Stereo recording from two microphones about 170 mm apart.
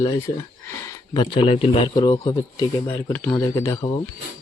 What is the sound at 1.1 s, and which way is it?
Speech, 30° left (ahead or behind).